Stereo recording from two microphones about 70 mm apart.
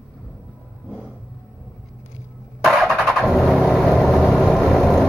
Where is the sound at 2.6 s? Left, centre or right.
Centre.